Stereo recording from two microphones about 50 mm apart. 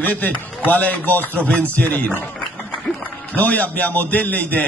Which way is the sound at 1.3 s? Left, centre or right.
Left.